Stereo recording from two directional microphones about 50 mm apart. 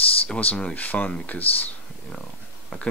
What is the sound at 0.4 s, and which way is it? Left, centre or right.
Speech, left.